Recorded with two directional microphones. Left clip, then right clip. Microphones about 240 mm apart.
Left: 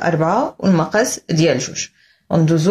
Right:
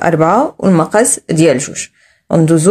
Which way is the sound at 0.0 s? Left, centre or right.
Right.